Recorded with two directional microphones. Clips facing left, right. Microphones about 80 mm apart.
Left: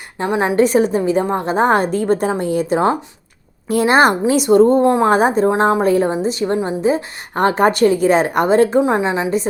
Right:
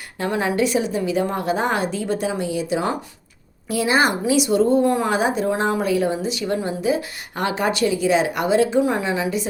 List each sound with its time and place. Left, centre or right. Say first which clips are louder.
0.2 s a woman's voice: left 5 dB; left
0.5 s a woman's voice: left 7 dB; left
8.8 s a woman's voice: left 4 dB; left